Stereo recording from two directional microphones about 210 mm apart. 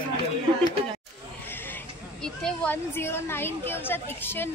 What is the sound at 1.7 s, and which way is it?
A woman's voice, 5° left (ahead or behind).